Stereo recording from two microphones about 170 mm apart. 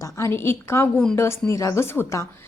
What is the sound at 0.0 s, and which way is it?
A woman's voice, 15° left (ahead or behind).